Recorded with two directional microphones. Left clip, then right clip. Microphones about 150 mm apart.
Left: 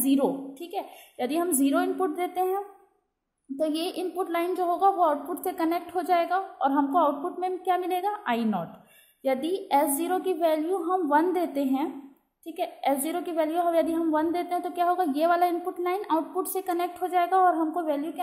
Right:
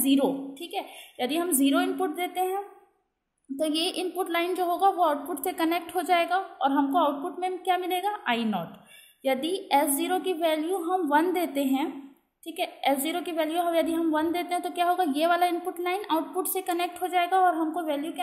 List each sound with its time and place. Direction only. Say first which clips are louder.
0.0 s a woman's voice: even; 15° left (ahead or behind)